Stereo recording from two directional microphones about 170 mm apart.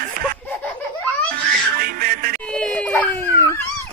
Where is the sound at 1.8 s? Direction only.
60° right (ahead or behind).